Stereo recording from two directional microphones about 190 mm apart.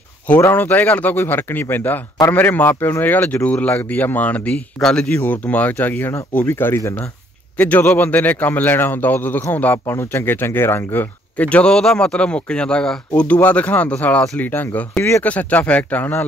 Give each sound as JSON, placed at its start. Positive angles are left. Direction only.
{"t": 0.3, "sound": "a man's voice", "side_deg": 15}